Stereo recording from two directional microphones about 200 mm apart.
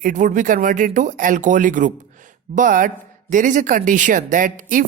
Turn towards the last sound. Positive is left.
turn(degrees=-40)  # may be behind; listen again after turning